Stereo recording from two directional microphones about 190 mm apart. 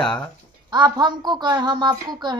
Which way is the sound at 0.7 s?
20° right (ahead or behind).